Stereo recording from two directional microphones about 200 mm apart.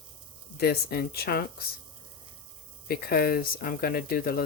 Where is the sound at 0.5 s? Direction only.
55° left (ahead or behind).